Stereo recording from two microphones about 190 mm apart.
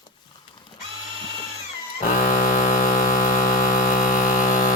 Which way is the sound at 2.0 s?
45° left (ahead or behind).